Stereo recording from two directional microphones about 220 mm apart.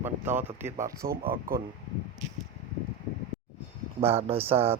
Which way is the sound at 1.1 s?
45° right (ahead or behind).